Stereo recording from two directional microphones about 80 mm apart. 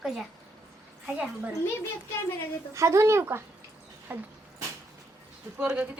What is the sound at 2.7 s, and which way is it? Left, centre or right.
Speech, right.